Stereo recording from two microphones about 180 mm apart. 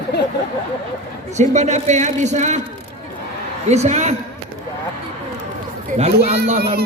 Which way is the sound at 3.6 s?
40° right (ahead or behind).